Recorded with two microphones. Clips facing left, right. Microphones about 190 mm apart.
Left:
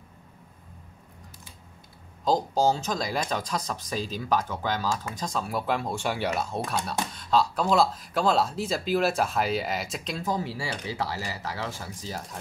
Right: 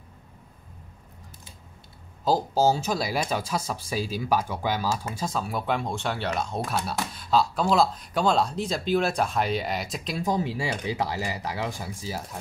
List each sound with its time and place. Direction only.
2.2 s speech: 5° right (ahead or behind)
10.2 s speech: 20° right (ahead or behind)